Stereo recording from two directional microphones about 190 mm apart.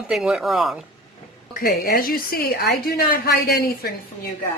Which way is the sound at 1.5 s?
50° left (ahead or behind).